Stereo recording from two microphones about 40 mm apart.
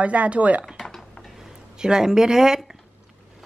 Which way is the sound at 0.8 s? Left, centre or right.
Centre.